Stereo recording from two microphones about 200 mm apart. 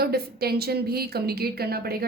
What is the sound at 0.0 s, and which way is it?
Speech, 50° right (ahead or behind).